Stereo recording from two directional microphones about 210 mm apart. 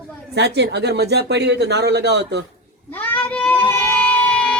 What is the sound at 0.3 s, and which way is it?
Speech, 55° right (ahead or behind).